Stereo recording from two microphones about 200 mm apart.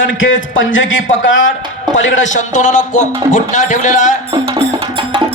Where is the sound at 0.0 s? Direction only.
70° left (ahead or behind).